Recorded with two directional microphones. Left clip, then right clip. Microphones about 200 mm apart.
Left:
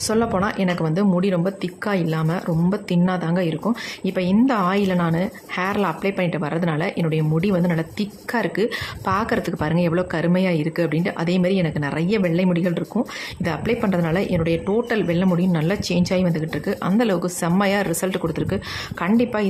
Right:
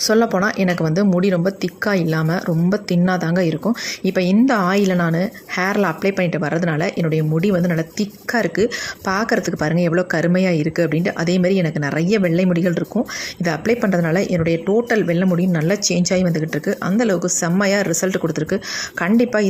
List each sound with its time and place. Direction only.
0.1 s a woman's voice: 15° right (ahead or behind)